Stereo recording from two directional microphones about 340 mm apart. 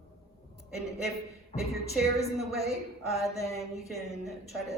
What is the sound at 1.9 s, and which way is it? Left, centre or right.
A woman's voice, centre.